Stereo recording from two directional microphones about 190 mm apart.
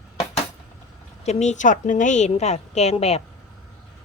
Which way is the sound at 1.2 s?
35° left (ahead or behind).